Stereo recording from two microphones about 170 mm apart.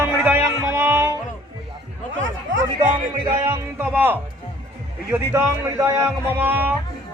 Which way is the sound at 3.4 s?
15° right (ahead or behind).